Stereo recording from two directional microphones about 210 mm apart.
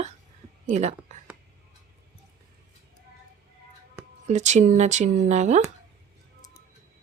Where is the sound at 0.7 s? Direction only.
35° right (ahead or behind).